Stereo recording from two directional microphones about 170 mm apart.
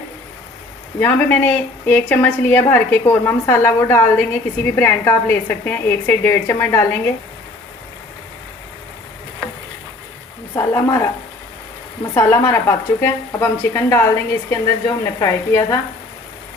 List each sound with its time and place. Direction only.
0.9 s a woman's voice: 10° left (ahead or behind)
10.5 s a woman's voice: 20° left (ahead or behind)
12.1 s a woman's voice: 15° left (ahead or behind)